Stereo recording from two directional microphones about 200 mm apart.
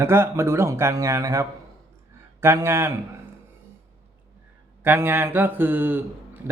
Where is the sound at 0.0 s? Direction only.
10° right (ahead or behind).